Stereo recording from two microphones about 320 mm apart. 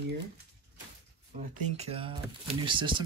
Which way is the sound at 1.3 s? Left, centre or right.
Centre.